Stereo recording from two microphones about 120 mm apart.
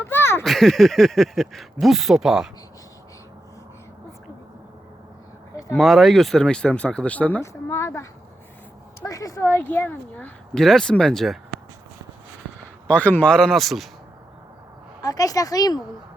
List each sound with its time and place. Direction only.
0.0 s a sound: 20° left (ahead or behind)
0.4 s speech: centre (ahead or behind)
5.7 s speech: centre (ahead or behind)
7.4 s speech: 25° left (ahead or behind); by 11.3 s 5° left (ahead or behind)
12.9 s speech: 10° left (ahead or behind)
15.0 s speech: 30° left (ahead or behind)